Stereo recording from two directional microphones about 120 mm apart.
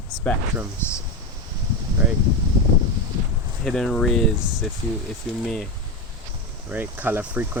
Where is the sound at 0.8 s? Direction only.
20° left (ahead or behind).